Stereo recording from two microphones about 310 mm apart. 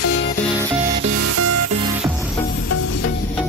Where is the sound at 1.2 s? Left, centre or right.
Right.